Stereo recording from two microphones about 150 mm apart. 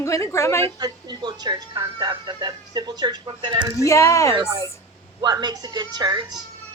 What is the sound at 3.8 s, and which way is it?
Speech, 20° left (ahead or behind).